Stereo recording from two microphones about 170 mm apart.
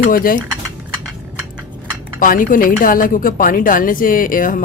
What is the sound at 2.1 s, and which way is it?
A woman's voice, 55° left (ahead or behind).